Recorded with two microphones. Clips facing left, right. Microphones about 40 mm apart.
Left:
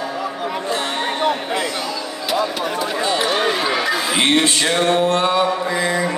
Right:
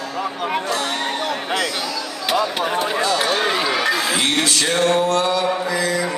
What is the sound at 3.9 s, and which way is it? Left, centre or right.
Male singing, left.